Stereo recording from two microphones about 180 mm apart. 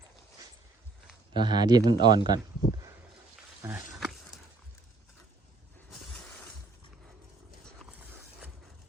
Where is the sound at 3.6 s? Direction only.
15° right (ahead or behind).